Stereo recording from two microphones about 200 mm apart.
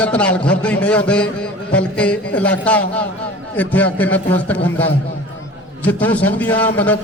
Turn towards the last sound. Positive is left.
turn(degrees=10)  # may be behind; listen again after turning